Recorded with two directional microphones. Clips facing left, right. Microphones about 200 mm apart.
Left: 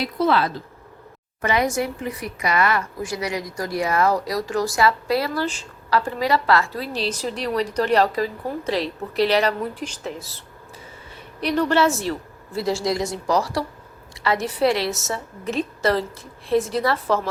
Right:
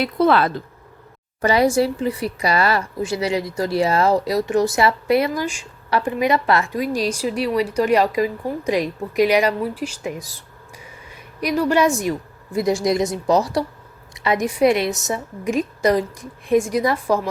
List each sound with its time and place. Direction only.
0.0 s speech: 55° right (ahead or behind)
1.4 s a woman's voice: 35° right (ahead or behind); by 17.2 s 15° right (ahead or behind)